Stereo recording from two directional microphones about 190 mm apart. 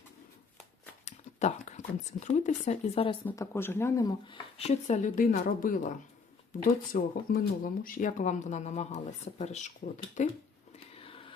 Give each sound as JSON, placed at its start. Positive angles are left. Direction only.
{"t": 1.0, "sound": "a sound", "side_deg": 35}
{"t": 2.2, "sound": "speech", "side_deg": 40}
{"t": 3.2, "sound": "speech", "side_deg": 15}
{"t": 4.5, "sound": "speech", "side_deg": 35}
{"t": 10.9, "sound": "whispering", "side_deg": 30}